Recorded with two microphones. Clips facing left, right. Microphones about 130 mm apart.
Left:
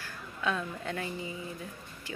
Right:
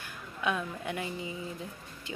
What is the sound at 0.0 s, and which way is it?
A woman's voice, 15° right (ahead or behind).